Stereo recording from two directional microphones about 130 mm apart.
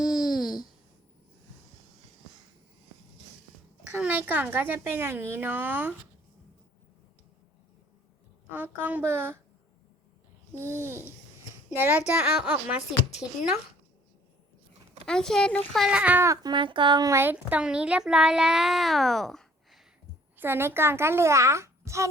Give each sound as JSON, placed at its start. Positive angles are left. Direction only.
{"t": 0.0, "sound": "a sound", "side_deg": 0}
{"t": 3.9, "sound": "a child's voice", "side_deg": -10}
{"t": 8.4, "sound": "a child's voice", "side_deg": -15}
{"t": 10.6, "sound": "babbling", "side_deg": -20}
{"t": 11.7, "sound": "a child's voice", "side_deg": -15}
{"t": 15.0, "sound": "a child's voice", "side_deg": 5}
{"t": 17.1, "sound": "babbling", "side_deg": -20}
{"t": 17.3, "sound": "speech", "side_deg": -10}
{"t": 20.3, "sound": "a woman's voice", "side_deg": -15}